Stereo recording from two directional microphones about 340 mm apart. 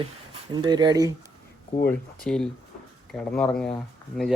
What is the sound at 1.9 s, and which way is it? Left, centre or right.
Speech, centre.